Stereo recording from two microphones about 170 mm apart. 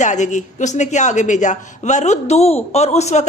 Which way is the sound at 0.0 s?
45° left (ahead or behind).